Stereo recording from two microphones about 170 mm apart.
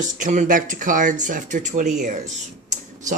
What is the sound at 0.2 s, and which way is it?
Speech, 45° right (ahead or behind).